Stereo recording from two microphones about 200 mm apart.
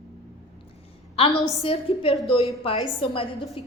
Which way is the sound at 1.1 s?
30° left (ahead or behind).